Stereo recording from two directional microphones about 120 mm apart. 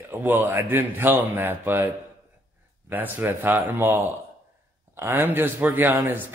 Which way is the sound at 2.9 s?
15° right (ahead or behind).